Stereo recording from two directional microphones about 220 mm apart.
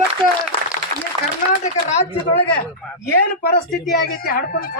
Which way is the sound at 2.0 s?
20° left (ahead or behind).